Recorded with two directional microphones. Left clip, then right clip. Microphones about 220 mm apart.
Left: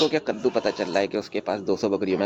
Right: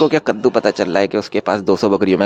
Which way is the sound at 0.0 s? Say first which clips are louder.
Right 9 dB; 30° right (ahead or behind).